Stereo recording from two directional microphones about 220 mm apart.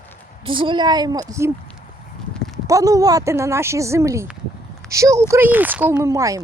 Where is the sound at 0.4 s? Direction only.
20° right (ahead or behind).